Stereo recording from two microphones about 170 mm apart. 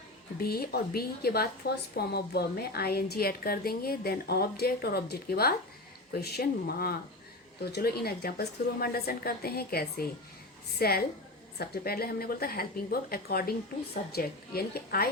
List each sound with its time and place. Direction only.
0.3 s a woman's voice: 65° left (ahead or behind)